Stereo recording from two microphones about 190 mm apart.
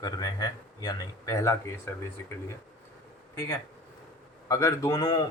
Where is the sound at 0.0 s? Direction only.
20° left (ahead or behind).